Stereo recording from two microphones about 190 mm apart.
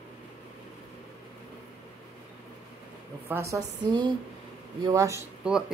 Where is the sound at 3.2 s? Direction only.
15° right (ahead or behind).